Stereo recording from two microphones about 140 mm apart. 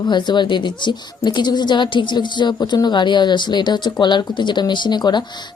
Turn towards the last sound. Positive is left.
turn(degrees=30)  # may be behind; listen again after turning